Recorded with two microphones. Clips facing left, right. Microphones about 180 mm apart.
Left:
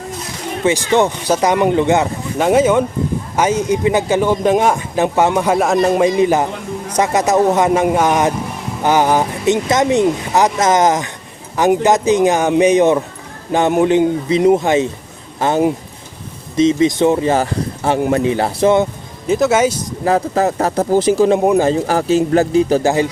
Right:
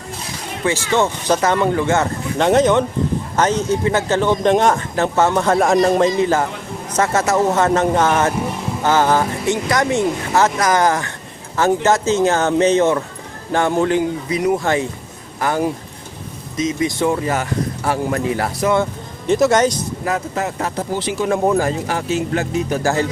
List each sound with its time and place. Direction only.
0.6 s speech: 20° left (ahead or behind)
2.4 s speech: 10° left (ahead or behind)
6.1 s speech: 15° left (ahead or behind)
19.3 s speech: 5° left (ahead or behind)
20.1 s speech: 35° left (ahead or behind)
21.2 s speech: 20° left (ahead or behind)
21.7 s speech: 35° left (ahead or behind)
22.8 s speech: 15° left (ahead or behind)